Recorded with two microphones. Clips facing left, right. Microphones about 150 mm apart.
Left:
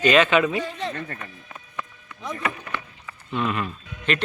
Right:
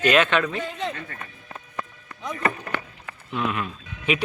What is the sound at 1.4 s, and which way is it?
Music, 35° right (ahead or behind).